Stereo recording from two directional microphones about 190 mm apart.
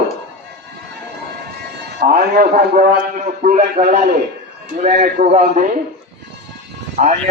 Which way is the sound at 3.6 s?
55° right (ahead or behind).